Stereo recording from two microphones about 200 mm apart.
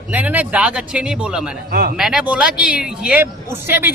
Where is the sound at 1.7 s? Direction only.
45° right (ahead or behind).